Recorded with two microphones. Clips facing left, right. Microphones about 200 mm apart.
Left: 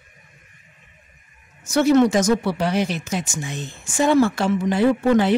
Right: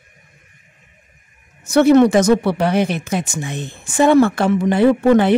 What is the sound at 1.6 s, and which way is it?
Speech, 60° right (ahead or behind).